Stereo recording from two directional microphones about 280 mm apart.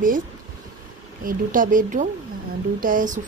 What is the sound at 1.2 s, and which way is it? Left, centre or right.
Speech, right.